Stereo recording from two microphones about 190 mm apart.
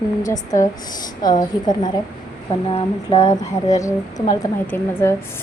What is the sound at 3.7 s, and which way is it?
A woman's voice, 15° left (ahead or behind).